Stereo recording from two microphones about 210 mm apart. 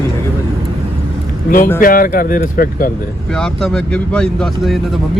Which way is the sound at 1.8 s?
40° left (ahead or behind).